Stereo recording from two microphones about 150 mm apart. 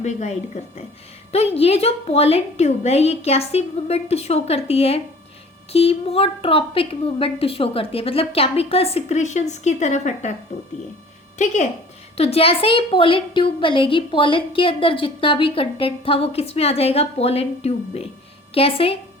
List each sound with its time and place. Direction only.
0.0 s a woman's voice: 50° left (ahead or behind)
11.3 s a woman's voice: 55° left (ahead or behind)
12.1 s a woman's voice: 40° left (ahead or behind)